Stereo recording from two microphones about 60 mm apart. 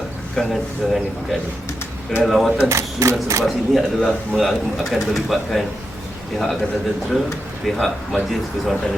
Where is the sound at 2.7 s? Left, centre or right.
Right.